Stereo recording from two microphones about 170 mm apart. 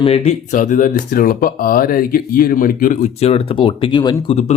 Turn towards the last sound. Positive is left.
turn(degrees=40)  # may be behind; listen again after turning